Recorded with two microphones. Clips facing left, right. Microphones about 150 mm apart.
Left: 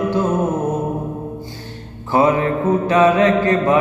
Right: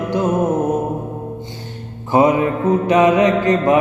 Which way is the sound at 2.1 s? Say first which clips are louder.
Right 1 dB; 15° right (ahead or behind).